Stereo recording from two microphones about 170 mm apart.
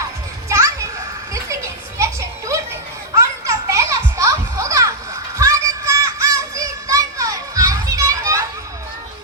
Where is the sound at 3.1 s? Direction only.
15° right (ahead or behind).